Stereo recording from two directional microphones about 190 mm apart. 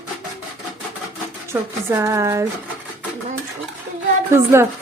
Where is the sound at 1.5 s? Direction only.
15° right (ahead or behind).